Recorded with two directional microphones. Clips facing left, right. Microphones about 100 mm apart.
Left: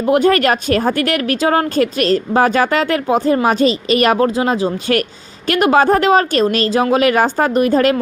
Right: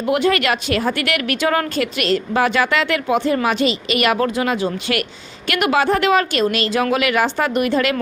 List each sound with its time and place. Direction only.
0.0 s speech: 40° left (ahead or behind)